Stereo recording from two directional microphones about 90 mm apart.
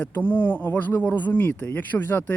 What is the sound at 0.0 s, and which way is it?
Speech, 15° left (ahead or behind).